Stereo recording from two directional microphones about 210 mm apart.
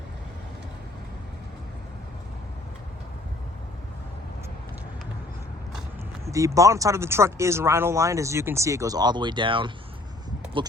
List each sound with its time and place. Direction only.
6.2 s speech: 15° right (ahead or behind)